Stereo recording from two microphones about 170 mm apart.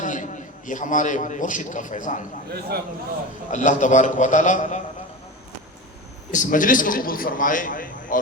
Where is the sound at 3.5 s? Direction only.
45° left (ahead or behind).